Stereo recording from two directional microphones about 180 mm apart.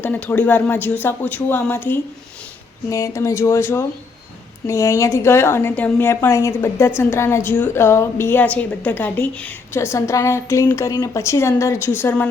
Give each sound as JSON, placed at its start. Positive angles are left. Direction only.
{"t": 0.0, "sound": "a woman's voice", "side_deg": 10}